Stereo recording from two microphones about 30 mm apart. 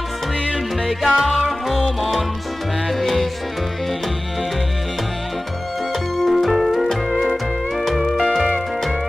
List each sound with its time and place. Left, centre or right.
1.0 s music: centre
1.7 s music: centre
6.1 s music: centre